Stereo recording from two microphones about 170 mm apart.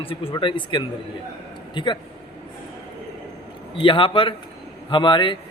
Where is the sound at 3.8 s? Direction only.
30° left (ahead or behind).